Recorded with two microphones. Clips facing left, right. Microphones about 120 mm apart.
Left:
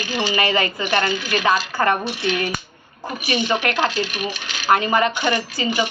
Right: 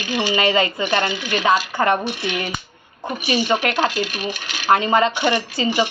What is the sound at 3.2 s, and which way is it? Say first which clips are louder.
Speech: right 1 dB; 25° right (ahead or behind).